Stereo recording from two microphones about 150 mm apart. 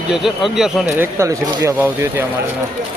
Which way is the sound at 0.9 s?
15° right (ahead or behind).